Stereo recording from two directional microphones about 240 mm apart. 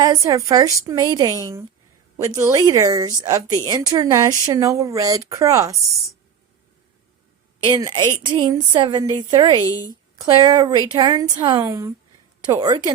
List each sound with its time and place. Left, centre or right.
0.0 s a woman's voice: centre
7.6 s a woman's voice: centre